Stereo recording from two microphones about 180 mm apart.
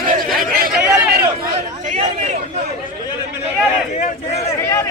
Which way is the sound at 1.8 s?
40° right (ahead or behind).